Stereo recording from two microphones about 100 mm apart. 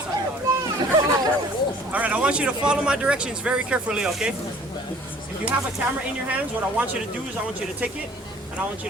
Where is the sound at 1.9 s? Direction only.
15° right (ahead or behind).